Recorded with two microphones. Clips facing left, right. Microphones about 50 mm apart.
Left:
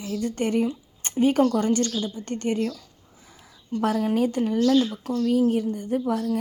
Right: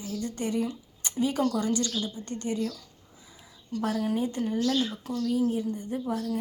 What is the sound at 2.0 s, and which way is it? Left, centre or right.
Speech, left.